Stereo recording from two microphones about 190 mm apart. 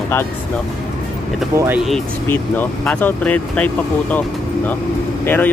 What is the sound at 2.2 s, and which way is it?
Speech, 10° left (ahead or behind).